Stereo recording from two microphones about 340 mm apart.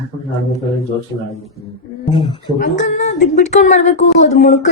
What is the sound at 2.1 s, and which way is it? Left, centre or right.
Speech, centre.